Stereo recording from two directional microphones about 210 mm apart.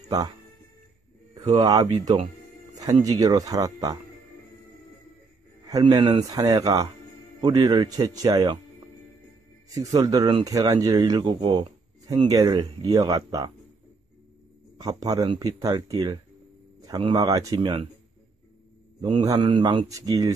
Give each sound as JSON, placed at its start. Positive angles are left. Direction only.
{"t": 0.1, "sound": "speech", "side_deg": -20}
{"t": 5.7, "sound": "speech", "side_deg": -20}
{"t": 9.8, "sound": "speech", "side_deg": -15}
{"t": 14.8, "sound": "speech", "side_deg": -15}
{"t": 18.9, "sound": "speech", "side_deg": -25}